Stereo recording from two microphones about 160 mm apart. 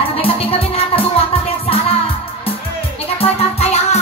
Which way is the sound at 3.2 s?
40° left (ahead or behind).